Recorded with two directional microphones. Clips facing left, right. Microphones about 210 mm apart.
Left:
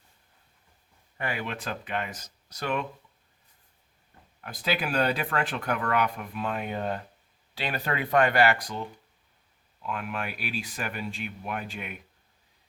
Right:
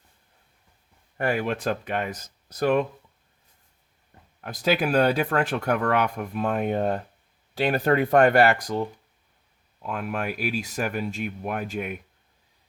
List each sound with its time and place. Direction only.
1.2 s speech: 45° right (ahead or behind)
4.4 s speech: 45° right (ahead or behind)
9.8 s speech: 45° right (ahead or behind)